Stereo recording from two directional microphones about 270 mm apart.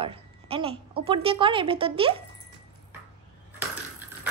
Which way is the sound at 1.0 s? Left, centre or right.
Centre.